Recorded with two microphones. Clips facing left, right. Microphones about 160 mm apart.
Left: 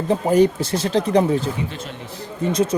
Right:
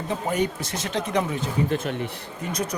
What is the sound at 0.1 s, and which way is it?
Speech, 35° left (ahead or behind).